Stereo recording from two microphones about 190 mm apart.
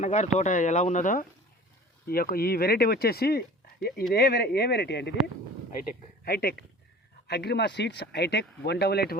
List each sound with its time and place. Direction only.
0.0 s speech: 35° left (ahead or behind); by 9.1 s 55° left (ahead or behind)